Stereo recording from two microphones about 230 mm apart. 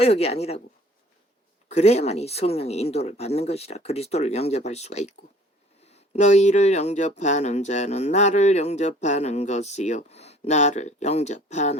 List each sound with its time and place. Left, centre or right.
0.0 s speech: left
1.7 s speech: left